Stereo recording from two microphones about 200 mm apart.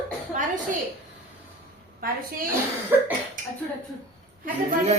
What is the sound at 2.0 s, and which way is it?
Speech, 45° right (ahead or behind).